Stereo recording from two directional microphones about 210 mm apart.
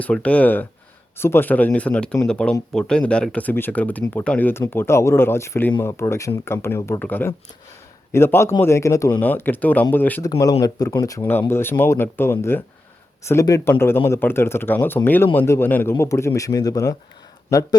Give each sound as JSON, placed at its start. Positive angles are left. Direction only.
{"t": 0.0, "sound": "speech", "side_deg": 5}